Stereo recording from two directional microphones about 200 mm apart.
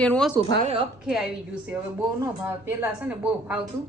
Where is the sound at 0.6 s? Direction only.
30° right (ahead or behind).